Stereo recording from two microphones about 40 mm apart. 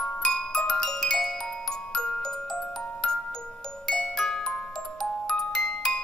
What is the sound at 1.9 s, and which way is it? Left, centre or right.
Glockenspiel, left.